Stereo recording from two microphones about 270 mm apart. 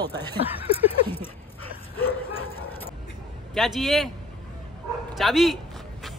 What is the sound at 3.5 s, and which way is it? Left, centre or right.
Speech, centre.